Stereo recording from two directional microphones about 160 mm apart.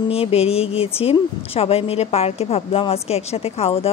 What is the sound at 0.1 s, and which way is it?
A woman's voice, 40° left (ahead or behind).